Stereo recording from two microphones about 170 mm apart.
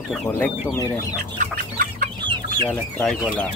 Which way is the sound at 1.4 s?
55° right (ahead or behind).